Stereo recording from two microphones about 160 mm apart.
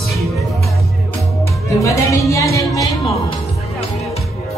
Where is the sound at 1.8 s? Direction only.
20° left (ahead or behind).